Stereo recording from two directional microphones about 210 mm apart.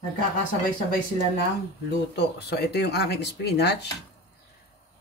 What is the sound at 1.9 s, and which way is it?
Speech, 55° left (ahead or behind).